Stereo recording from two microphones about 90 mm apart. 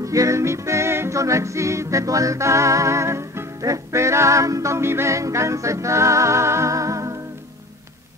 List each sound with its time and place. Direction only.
0.0 s music: 35° right (ahead or behind)